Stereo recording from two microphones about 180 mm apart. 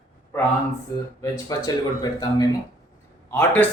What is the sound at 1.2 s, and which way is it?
Speech, 20° left (ahead or behind).